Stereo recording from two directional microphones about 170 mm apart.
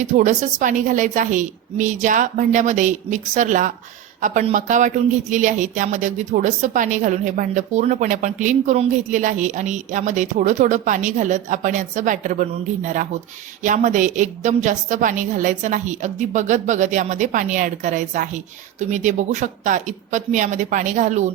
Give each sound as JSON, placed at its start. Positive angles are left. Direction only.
{"t": 0.0, "sound": "a woman's voice", "side_deg": -45}